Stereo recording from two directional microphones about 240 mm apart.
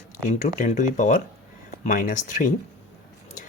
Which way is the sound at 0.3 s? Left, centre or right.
Left.